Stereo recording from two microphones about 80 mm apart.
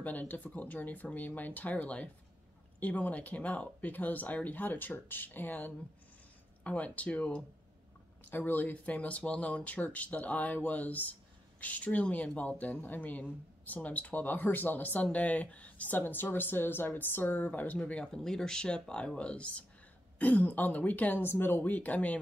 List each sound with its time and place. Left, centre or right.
0.0 s speech: left